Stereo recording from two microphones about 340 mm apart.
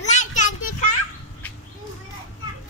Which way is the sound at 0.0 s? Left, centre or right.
Left.